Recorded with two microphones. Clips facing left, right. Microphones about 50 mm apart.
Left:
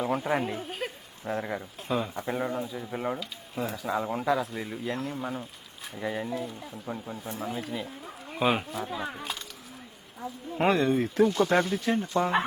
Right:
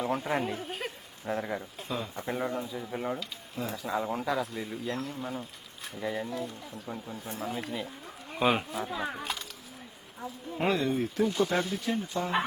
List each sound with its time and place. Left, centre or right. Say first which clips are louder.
0.0 s speech: left 2 dB; centre
1.2 s speech: left 1 dB; centre
1.9 s speech: left 6 dB; left
2.2 s speech: left 2 dB; centre
3.5 s speech: left 4 dB; left
3.9 s speech: left 3 dB; centre
7.1 s speech: left 2 dB; left
7.4 s speech: left 1 dB; centre
10.7 s speech: left 4 dB; left